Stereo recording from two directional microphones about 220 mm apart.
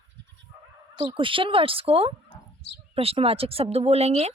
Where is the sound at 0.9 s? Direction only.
25° right (ahead or behind).